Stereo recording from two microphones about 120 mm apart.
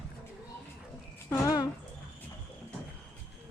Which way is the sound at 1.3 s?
30° left (ahead or behind).